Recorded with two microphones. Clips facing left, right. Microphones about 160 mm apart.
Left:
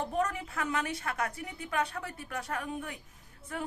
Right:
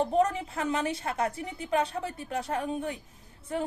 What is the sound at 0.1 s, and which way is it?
A woman's voice, 25° right (ahead or behind).